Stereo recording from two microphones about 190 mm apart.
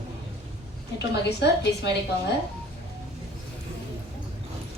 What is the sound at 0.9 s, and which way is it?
Speech, 65° left (ahead or behind).